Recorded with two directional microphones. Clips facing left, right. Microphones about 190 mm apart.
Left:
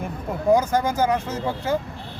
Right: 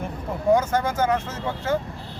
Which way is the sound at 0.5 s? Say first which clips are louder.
Left 1 dB; 10° left (ahead or behind).